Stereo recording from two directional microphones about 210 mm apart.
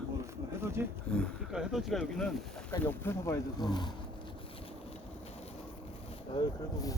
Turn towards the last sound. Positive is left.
turn(degrees=15)  # may be behind; listen again after turning